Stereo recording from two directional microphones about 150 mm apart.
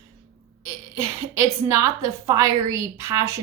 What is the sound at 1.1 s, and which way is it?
Speech, 20° right (ahead or behind).